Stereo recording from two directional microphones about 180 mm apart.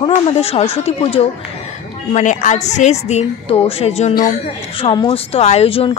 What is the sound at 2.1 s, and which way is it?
Speech, 45° left (ahead or behind).